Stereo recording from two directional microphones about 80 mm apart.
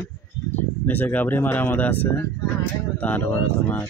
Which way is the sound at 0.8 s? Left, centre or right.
Left.